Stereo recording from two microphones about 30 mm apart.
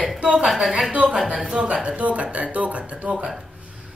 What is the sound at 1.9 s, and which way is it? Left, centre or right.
Speech, right.